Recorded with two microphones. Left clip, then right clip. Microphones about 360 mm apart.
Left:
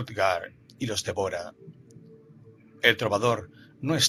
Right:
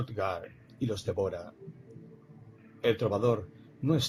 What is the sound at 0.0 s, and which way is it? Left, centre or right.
Speech, left.